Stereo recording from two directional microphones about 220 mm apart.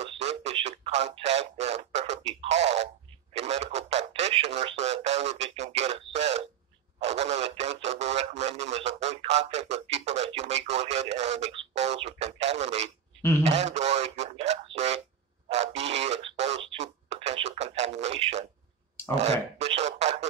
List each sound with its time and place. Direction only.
0.0 s radio: 30° right (ahead or behind)
3.3 s speech: 30° right (ahead or behind)
13.4 s a sound: 30° right (ahead or behind)